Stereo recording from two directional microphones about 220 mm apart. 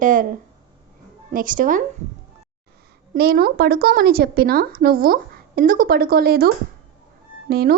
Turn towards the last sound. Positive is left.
turn(degrees=-45)  # may be behind; listen again after turning